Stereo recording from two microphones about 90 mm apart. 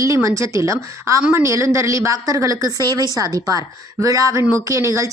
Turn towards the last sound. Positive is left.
turn(degrees=-35)  # may be behind; listen again after turning